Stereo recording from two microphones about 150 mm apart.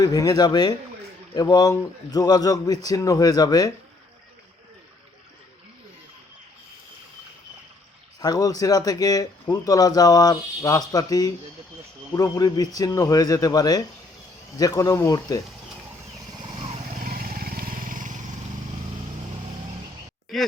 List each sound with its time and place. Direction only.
0.0 s speech: 25° left (ahead or behind)
8.2 s speech: 25° left (ahead or behind)
17.0 s vehicle: 70° right (ahead or behind)